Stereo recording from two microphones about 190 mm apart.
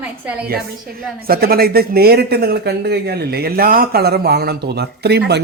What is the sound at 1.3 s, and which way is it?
A man's voice, 50° right (ahead or behind).